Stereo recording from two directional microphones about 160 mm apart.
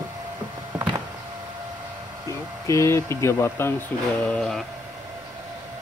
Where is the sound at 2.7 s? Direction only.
20° left (ahead or behind).